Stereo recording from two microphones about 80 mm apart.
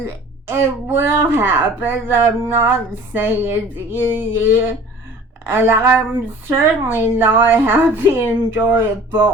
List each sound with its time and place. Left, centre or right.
0.0 s a woman's voice: right